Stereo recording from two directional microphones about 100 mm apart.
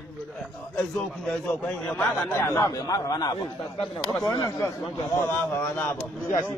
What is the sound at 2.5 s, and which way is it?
Speech, 40° left (ahead or behind).